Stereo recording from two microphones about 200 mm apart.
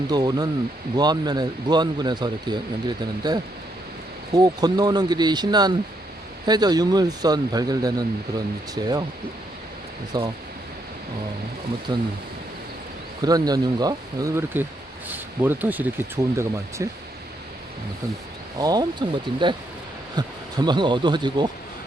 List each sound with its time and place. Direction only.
0.1 s speech: 20° right (ahead or behind)
10.1 s speech: 20° right (ahead or behind)
13.2 s speech: 20° right (ahead or behind)
18.6 s speech: 20° right (ahead or behind)